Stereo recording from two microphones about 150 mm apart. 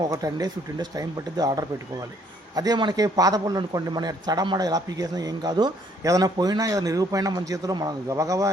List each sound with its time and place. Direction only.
0.0 s a man's voice: 25° right (ahead or behind)